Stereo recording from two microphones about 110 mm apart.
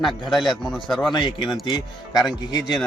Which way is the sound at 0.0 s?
Centre (ahead or behind).